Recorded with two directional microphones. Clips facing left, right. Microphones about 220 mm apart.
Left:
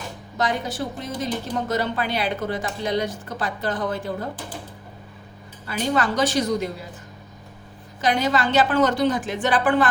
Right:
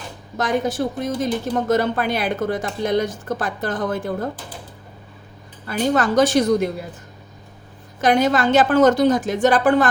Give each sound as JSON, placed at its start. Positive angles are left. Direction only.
{"t": 0.3, "sound": "speech", "side_deg": -50}
{"t": 5.6, "sound": "speech", "side_deg": -45}
{"t": 8.0, "sound": "speech", "side_deg": -50}